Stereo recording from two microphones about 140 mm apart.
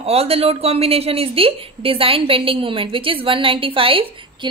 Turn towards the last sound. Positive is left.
turn(degrees=-35)  # may be behind; listen again after turning